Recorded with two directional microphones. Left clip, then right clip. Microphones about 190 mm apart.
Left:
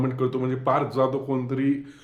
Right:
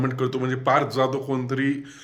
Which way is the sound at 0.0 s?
Centre (ahead or behind).